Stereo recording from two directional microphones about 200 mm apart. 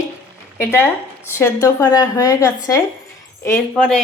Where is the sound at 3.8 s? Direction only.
5° left (ahead or behind).